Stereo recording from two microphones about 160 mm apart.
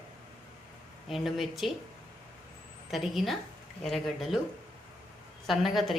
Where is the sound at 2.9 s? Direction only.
Centre (ahead or behind).